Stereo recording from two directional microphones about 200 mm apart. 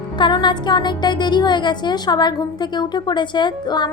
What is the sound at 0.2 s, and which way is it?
A woman's voice, 20° left (ahead or behind).